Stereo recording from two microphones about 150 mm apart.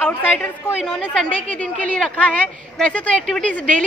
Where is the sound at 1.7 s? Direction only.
10° left (ahead or behind).